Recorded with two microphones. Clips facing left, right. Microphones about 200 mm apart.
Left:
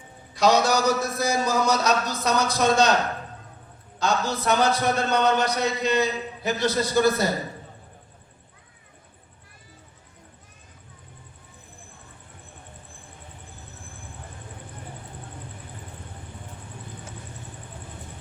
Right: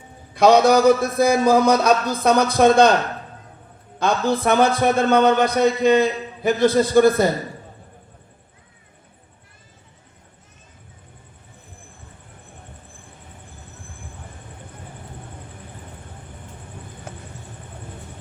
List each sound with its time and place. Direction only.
0.3 s a man's voice: 55° right (ahead or behind)
3.9 s a man's voice: 55° right (ahead or behind)